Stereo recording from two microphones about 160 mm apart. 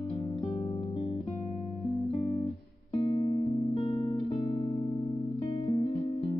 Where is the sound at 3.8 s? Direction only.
30° left (ahead or behind).